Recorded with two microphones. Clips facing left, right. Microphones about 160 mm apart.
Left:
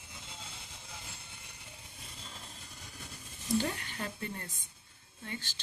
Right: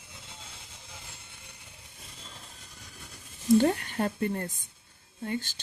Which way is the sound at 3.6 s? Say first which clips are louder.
Right 11 dB; 50° right (ahead or behind).